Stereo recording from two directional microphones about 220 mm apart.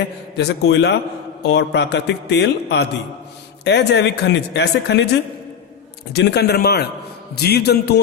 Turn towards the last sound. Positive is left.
turn(degrees=50)  # may be behind; listen again after turning